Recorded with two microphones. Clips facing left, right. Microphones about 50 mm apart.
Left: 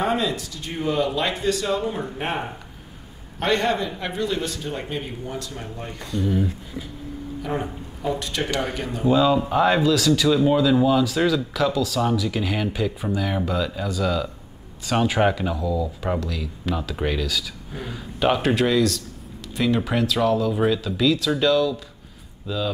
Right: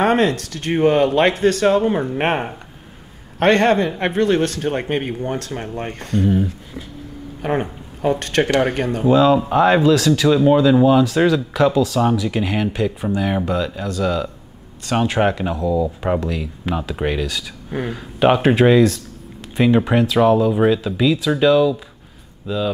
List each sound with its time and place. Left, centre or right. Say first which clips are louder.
0.0 s speech: right 7 dB; right
6.2 s speech: right 3 dB; right
9.0 s speech: right 4 dB; centre